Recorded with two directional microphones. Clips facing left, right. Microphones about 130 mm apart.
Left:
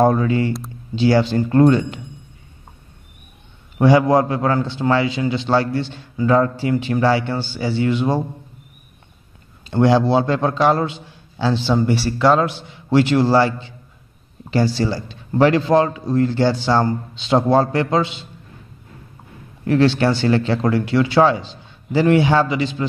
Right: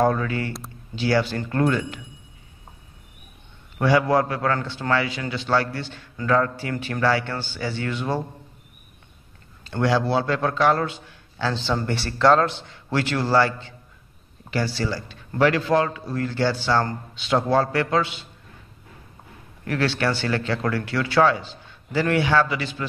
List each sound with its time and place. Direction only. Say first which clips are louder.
0.0 s speech: left 6 dB; 25° left (ahead or behind)
3.7 s a man's voice: left 5 dB; 20° left (ahead or behind)
9.7 s speech: left 6 dB; 25° left (ahead or behind); by 12.5 s 5° left (ahead or behind)
12.6 s a man's voice: left 9 dB; 20° left (ahead or behind)
19.6 s speech: left 8 dB; 25° left (ahead or behind)